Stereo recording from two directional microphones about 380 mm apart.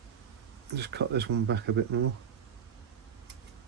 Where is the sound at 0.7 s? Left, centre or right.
Right.